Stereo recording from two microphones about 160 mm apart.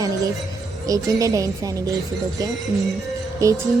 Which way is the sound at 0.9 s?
20° right (ahead or behind).